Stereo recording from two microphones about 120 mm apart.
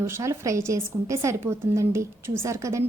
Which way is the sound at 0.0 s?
25° right (ahead or behind).